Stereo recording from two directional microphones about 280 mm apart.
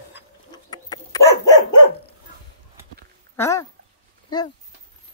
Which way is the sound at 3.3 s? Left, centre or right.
Centre.